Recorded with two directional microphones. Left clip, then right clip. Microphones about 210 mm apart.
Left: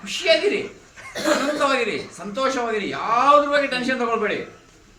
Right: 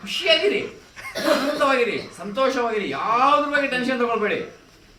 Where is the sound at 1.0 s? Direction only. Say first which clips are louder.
Right 4 dB; 15° right (ahead or behind).